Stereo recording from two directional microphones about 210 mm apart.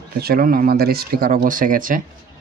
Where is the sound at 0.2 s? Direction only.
45° right (ahead or behind).